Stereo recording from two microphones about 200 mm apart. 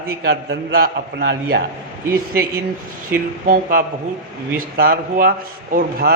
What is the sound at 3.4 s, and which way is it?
A man's voice, 45° right (ahead or behind).